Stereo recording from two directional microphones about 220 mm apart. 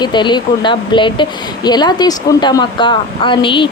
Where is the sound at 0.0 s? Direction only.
20° left (ahead or behind).